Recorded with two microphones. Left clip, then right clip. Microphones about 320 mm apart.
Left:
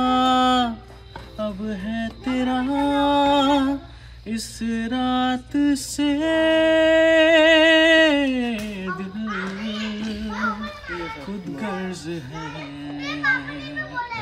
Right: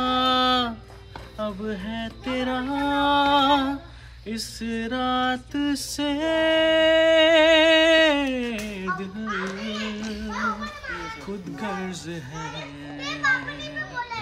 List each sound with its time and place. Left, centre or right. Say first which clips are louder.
0.0 s music: left 3 dB; centre
1.4 s speech: left 1 dB; centre
2.3 s a sound: left 3 dB; centre
4.3 s music: left 2 dB; centre
11.6 s music: left 2 dB; centre
13.0 s children playing: left 1 dB; right